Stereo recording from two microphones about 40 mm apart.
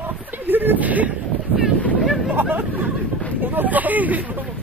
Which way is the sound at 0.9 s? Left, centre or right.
Right.